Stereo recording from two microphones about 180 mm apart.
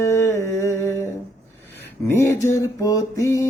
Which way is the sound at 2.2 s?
15° left (ahead or behind).